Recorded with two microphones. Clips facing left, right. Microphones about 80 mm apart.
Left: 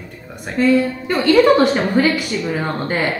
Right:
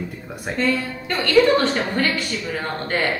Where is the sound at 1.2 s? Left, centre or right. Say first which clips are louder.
Left 4 dB; left.